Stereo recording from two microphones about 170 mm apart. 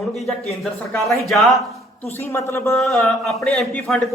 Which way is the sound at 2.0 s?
10° left (ahead or behind).